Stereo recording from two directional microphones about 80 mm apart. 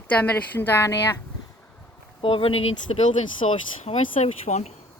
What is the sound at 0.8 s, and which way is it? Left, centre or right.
Speech, left.